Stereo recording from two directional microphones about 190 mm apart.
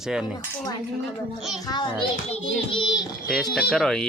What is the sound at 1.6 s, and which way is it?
A child's voice, 25° left (ahead or behind).